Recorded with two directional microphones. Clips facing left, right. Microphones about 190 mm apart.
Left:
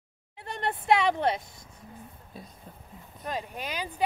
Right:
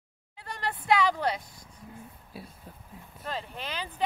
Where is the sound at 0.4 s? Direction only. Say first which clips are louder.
Left 3 dB; 25° left (ahead or behind).